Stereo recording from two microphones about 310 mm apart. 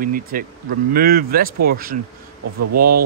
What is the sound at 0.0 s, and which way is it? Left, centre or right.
Speech, right.